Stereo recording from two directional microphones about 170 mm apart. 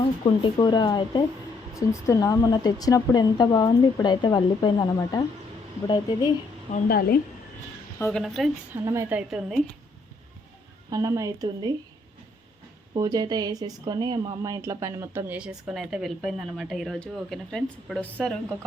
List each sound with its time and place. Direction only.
0.0 s a woman's voice: 30° left (ahead or behind)
6.8 s a woman's voice: 60° left (ahead or behind)
7.9 s a woman's voice: 15° left (ahead or behind)
8.2 s a woman's voice: centre (ahead or behind)
8.7 s speech: 15° right (ahead or behind)
10.8 s speech: 20° right (ahead or behind)
12.9 s a woman's voice: 20° right (ahead or behind); by 18.5 s centre (ahead or behind)